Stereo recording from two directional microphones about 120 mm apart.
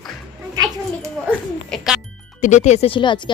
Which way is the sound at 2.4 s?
85° left.